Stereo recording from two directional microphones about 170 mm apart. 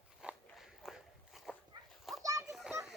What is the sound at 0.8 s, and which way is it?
Walk, centre (ahead or behind).